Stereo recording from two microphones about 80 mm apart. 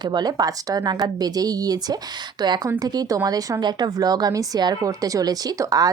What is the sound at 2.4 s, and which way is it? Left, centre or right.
A woman's voice, right.